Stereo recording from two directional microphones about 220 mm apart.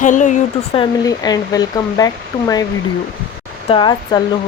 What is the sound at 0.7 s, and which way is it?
Speech, 15° left (ahead or behind).